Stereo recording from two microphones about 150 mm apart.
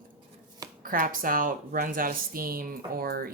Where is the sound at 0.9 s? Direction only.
70° right (ahead or behind).